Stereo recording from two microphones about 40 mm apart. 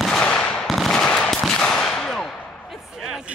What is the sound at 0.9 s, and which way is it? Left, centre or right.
Machine gun, left.